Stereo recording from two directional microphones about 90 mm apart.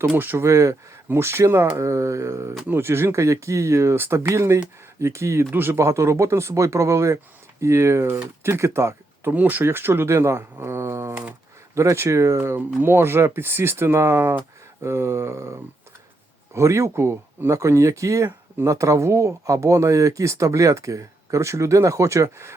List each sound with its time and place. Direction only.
0.1 s speech: 25° right (ahead or behind)
9.3 s speech: 20° right (ahead or behind)
16.6 s speech: 30° right (ahead or behind)